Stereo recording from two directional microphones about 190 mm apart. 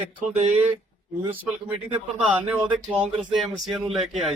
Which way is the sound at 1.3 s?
25° right (ahead or behind).